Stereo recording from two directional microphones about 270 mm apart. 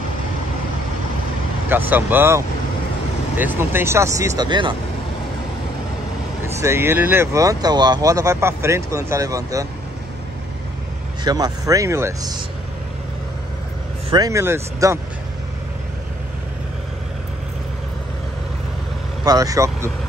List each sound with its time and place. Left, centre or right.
1.7 s speech: centre
6.4 s speech: centre
11.2 s speech: centre
14.1 s speech: centre
19.2 s speech: centre